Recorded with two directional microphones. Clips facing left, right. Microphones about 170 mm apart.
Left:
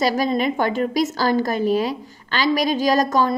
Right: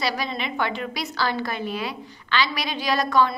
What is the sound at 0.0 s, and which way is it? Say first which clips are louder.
A woman's voice: left 8 dB; 45° left (ahead or behind).